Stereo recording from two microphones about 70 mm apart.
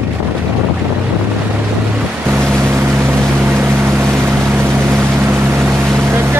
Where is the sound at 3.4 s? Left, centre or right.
Right.